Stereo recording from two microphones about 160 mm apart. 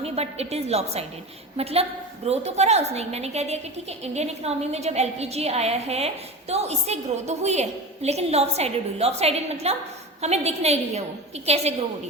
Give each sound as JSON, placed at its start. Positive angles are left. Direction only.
{"t": 0.0, "sound": "a woman's voice", "side_deg": -40}